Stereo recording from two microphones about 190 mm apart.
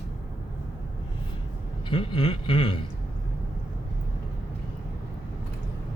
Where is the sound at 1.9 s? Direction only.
30° left (ahead or behind).